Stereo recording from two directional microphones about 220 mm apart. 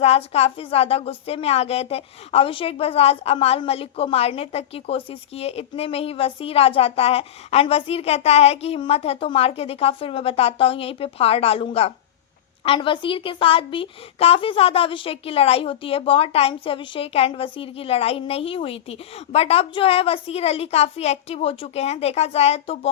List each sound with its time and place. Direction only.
0.0 s a woman's voice: 30° left (ahead or behind)